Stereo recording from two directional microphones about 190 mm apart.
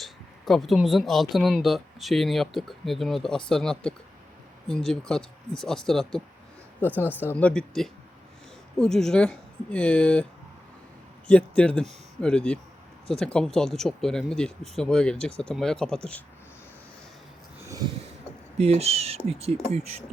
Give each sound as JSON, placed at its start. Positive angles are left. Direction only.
{"t": 0.0, "sound": "speech", "side_deg": 0}
{"t": 11.3, "sound": "speech", "side_deg": 5}
{"t": 18.5, "sound": "speech", "side_deg": -35}